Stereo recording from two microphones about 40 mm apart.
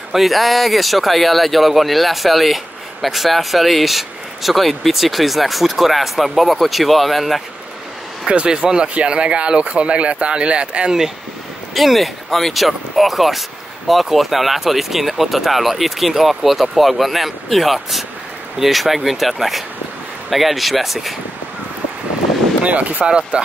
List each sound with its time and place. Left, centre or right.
0.1 s speech: centre
8.3 s speech: right
11.7 s speech: centre
22.6 s speech: right
23.0 s speech: right